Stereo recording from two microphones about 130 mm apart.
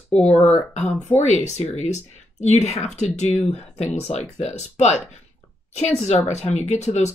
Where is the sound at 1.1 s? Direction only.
60° left (ahead or behind).